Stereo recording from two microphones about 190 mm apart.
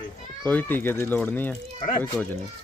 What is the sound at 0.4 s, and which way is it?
A child's voice, 10° left (ahead or behind).